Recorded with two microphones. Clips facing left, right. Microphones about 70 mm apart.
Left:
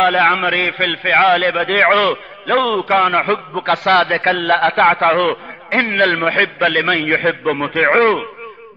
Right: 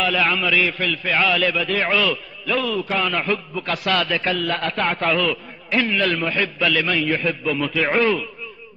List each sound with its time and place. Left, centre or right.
0.0 s a man's voice: left